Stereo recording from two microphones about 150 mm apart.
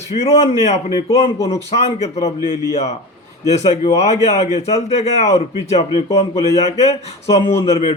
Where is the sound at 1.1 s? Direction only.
20° left (ahead or behind).